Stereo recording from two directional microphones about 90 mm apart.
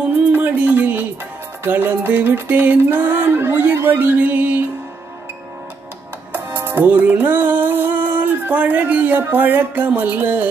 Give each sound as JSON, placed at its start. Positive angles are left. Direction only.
{"t": 0.0, "sound": "music", "side_deg": -15}
{"t": 6.3, "sound": "music", "side_deg": -25}